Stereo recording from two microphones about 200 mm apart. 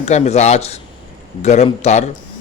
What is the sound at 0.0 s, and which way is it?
Speech, 35° left (ahead or behind).